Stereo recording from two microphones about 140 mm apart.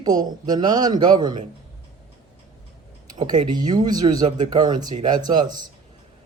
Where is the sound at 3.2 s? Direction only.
30° right (ahead or behind).